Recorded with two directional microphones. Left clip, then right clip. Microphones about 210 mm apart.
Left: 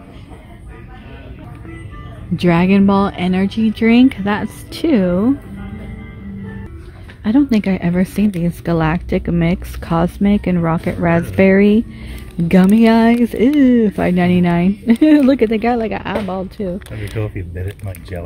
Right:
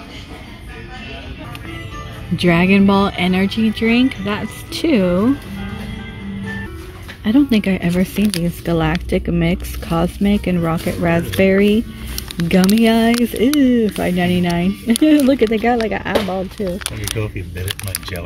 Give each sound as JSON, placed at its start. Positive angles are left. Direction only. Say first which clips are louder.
{"t": 2.3, "sound": "speech", "louder": "even", "side_deg": 10}
{"t": 7.2, "sound": "speech", "louder": "even", "side_deg": 15}
{"t": 17.2, "sound": "speech", "louder": "left 2 dB", "side_deg": 40}